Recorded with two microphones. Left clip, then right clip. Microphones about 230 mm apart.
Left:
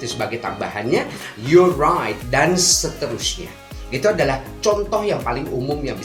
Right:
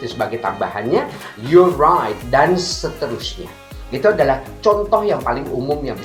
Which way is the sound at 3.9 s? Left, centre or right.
Left.